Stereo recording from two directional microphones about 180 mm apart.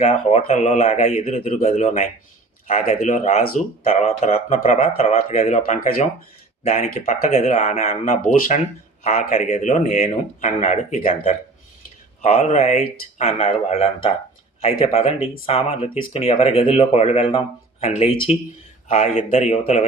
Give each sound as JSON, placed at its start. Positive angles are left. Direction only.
{"t": 0.0, "sound": "speech", "side_deg": 35}